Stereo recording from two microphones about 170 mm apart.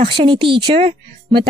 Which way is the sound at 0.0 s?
30° right (ahead or behind).